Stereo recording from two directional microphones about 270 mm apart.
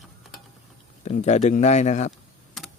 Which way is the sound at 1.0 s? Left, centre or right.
Left.